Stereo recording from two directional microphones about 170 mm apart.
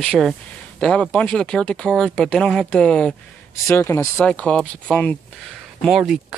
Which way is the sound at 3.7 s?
15° left (ahead or behind).